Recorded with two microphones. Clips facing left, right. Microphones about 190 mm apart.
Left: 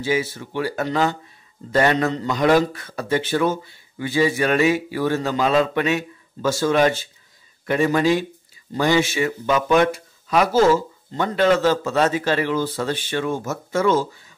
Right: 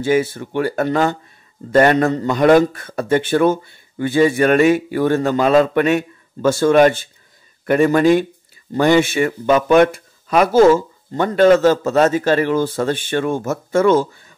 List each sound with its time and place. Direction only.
0.0 s speech: 50° right (ahead or behind)